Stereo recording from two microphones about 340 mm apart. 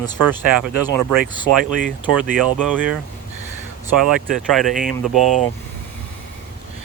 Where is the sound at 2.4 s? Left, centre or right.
Centre.